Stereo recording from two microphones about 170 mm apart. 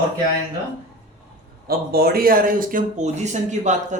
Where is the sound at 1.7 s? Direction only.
65° right (ahead or behind).